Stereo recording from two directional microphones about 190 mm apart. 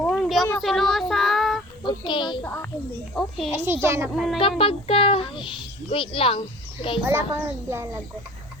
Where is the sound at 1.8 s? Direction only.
25° left (ahead or behind).